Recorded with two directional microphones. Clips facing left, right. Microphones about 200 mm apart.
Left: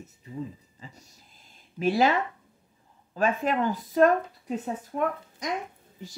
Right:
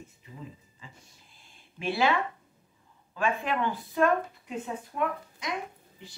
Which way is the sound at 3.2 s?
40° left (ahead or behind).